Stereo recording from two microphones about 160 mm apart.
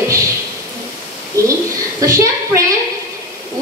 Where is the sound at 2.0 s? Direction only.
20° right (ahead or behind).